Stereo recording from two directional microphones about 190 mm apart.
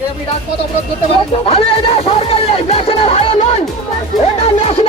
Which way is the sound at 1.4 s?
30° left (ahead or behind).